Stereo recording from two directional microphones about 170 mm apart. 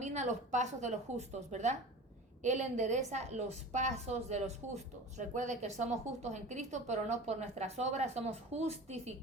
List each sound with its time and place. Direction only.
0.0 s a woman's voice: 40° right (ahead or behind)